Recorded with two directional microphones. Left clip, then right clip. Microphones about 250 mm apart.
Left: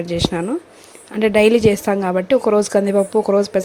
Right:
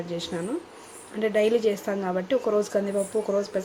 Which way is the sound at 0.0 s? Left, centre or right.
Left.